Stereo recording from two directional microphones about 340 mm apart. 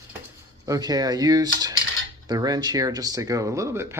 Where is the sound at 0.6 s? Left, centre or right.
Centre.